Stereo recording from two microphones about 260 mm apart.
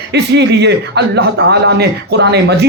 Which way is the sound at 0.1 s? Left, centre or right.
Right.